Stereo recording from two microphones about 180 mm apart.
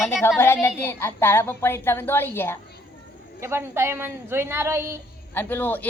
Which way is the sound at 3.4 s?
15° right (ahead or behind).